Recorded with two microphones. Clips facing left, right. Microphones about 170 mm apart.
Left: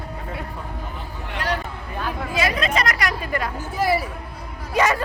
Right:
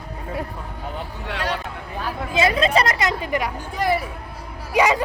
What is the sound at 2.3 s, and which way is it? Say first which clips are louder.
Chatter: right 5 dB; 25° right (ahead or behind).